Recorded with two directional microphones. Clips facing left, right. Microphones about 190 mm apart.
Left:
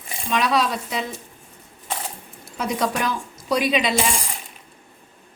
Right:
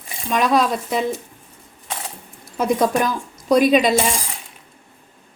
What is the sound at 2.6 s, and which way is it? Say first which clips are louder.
Speech: right 5 dB; 50° right (ahead or behind).